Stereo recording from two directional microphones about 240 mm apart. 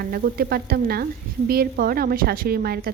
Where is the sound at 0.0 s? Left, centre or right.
Right.